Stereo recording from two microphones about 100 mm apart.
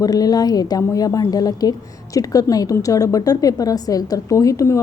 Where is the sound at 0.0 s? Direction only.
40° left (ahead or behind).